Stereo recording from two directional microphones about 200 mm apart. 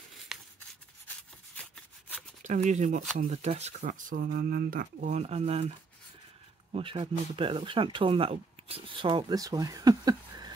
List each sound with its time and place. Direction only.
0.3 s a sound: centre (ahead or behind)
1.6 s rub: 5° left (ahead or behind)
2.4 s speech: 35° right (ahead or behind)
6.7 s speech: 25° right (ahead or behind)